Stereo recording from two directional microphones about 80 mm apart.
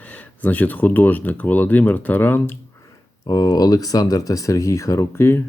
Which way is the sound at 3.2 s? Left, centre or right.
Left.